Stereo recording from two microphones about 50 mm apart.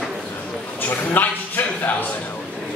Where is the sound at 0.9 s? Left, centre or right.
Left.